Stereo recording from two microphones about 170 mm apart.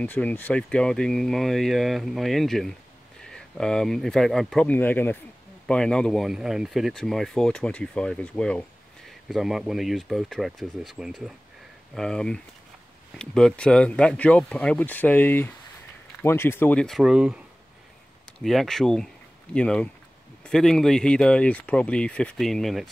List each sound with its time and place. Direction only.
0.0 s speech: 10° left (ahead or behind)
18.4 s speech: centre (ahead or behind)